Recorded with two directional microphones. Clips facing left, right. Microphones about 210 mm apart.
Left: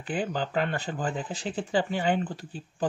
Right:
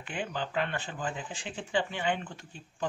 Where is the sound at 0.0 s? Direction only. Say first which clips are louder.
Left 6 dB; 35° left (ahead or behind).